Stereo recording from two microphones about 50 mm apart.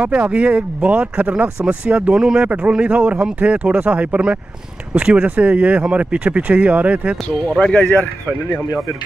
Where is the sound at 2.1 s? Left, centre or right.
Centre.